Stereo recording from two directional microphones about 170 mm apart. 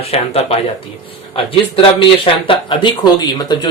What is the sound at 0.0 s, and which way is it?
Speech, 35° left (ahead or behind).